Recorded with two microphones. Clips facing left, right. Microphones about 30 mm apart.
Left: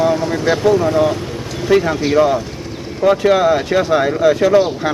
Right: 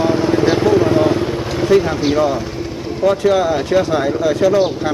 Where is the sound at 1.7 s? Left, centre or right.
Centre.